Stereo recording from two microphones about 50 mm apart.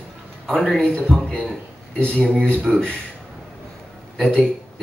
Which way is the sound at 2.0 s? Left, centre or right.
Left.